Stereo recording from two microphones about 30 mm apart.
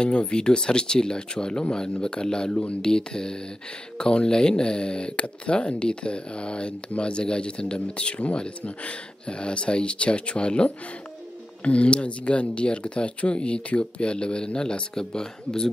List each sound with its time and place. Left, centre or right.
0.1 s speech: left